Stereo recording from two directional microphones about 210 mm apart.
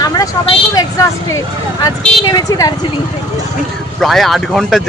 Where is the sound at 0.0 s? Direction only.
15° left (ahead or behind).